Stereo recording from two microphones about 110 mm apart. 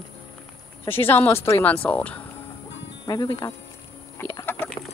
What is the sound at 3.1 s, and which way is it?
Speech, 35° left (ahead or behind).